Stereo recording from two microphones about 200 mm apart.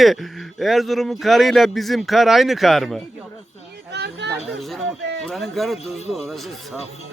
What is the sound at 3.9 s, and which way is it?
Chatter, 55° right (ahead or behind).